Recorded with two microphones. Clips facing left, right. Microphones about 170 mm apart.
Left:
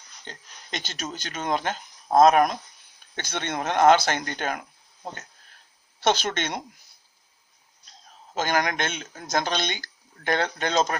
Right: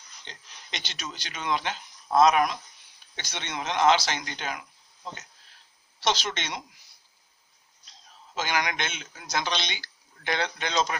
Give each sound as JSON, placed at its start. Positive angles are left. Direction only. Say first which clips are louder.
{"t": 0.2, "sound": "speech", "louder": "left 5 dB", "side_deg": 45}
{"t": 8.3, "sound": "speech", "louder": "left 4 dB", "side_deg": 45}